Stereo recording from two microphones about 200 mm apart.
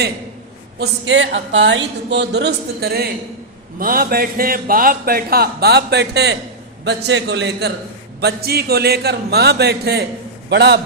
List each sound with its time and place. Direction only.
0.8 s a woman's voice: 65° right (ahead or behind)